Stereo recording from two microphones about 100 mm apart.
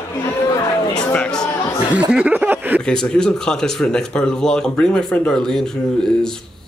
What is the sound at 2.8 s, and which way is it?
Speech, 5° left (ahead or behind).